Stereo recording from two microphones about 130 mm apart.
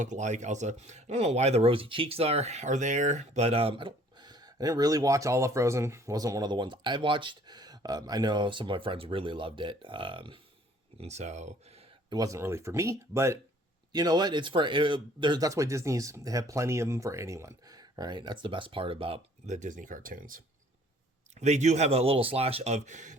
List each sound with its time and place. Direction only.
0.0 s speech: 65° right (ahead or behind); by 10.4 s 40° right (ahead or behind)
11.0 s speech: 60° right (ahead or behind)
12.1 s speech: 25° right (ahead or behind)
13.9 s speech: 30° right (ahead or behind)
19.5 s speech: 75° right (ahead or behind); by 20.4 s 90° right
21.3 s speech: 60° right (ahead or behind)